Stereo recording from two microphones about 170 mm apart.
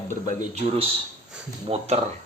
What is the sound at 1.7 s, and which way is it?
Speech, 40° right (ahead or behind).